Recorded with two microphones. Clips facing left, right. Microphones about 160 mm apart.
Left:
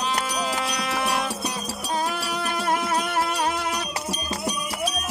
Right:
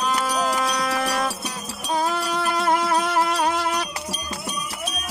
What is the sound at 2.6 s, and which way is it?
Music, 90° right.